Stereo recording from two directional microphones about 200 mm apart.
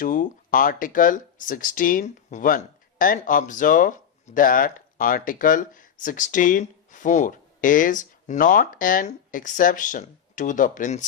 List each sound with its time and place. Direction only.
0.0 s speech: 45° left (ahead or behind)